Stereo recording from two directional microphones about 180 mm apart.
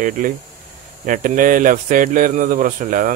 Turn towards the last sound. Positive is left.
turn(degrees=-45)  # may be behind; listen again after turning